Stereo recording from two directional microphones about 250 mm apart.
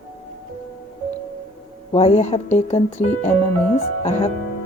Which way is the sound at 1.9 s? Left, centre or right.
Left.